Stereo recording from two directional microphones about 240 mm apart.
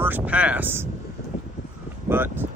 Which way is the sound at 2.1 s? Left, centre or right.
Centre.